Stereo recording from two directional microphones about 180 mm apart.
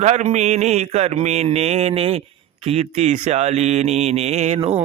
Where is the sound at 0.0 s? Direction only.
40° right (ahead or behind).